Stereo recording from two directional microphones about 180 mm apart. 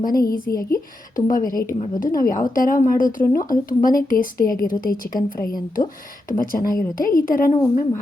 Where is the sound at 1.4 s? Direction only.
20° left (ahead or behind).